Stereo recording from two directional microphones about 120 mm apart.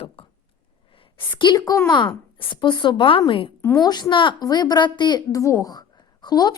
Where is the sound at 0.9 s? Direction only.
45° left (ahead or behind).